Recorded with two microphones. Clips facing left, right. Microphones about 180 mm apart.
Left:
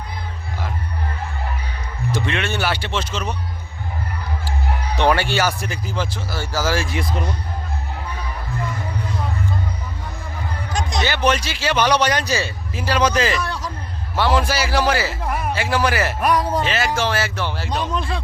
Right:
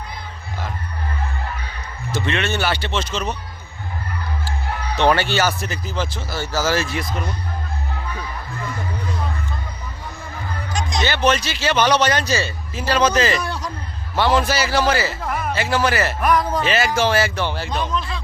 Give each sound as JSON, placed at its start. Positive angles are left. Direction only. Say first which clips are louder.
{"t": 2.1, "sound": "a man's voice", "louder": "right 2 dB", "side_deg": 10}
{"t": 4.9, "sound": "a man's voice", "louder": "right 1 dB", "side_deg": 10}
{"t": 7.0, "sound": "speech", "louder": "left 2 dB", "side_deg": 30}
{"t": 10.7, "sound": "music", "louder": "left 1 dB", "side_deg": 55}
{"t": 11.0, "sound": "a man's voice", "louder": "right 1 dB", "side_deg": 10}
{"t": 16.6, "sound": "speech", "louder": "right 2 dB", "side_deg": -5}